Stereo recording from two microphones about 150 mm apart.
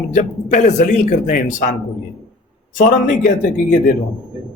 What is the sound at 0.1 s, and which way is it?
A man's voice, 55° left (ahead or behind).